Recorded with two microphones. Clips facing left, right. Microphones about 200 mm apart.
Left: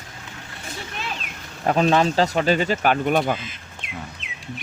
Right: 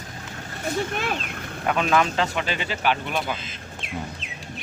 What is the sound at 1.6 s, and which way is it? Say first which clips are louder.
Speech: left 4 dB; 35° left (ahead or behind).